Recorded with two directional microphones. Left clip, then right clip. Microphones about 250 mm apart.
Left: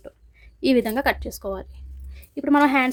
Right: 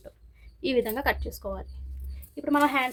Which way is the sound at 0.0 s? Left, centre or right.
Left.